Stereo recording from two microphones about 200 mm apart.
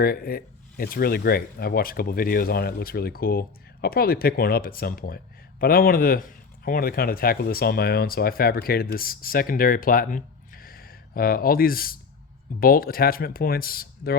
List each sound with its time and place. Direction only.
0.0 s speech: 50° left (ahead or behind)